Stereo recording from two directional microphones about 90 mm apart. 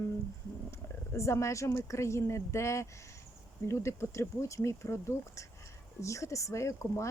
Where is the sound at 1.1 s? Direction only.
35° left (ahead or behind).